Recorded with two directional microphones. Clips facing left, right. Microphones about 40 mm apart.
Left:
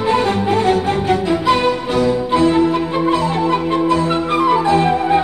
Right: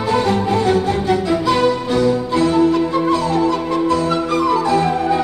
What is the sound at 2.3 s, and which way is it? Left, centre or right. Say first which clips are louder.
Music: left 2 dB; left.